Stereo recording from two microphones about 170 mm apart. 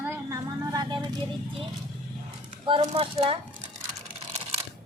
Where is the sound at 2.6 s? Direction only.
30° right (ahead or behind).